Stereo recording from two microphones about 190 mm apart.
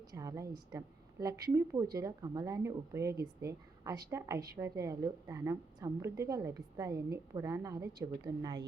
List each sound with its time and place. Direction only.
0.1 s a woman's voice: 15° right (ahead or behind)